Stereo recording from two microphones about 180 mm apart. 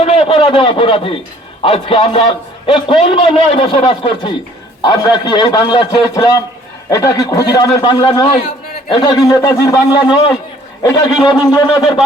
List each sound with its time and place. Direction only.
0.0 s a man's voice: 30° left (ahead or behind)